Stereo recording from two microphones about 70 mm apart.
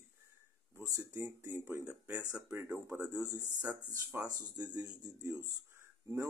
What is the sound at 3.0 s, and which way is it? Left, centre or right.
Speech, right.